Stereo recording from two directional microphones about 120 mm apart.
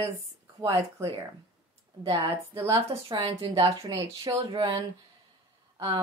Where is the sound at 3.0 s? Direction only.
40° right (ahead or behind).